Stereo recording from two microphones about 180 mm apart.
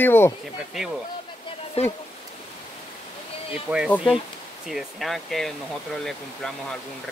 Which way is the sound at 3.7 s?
10° right (ahead or behind).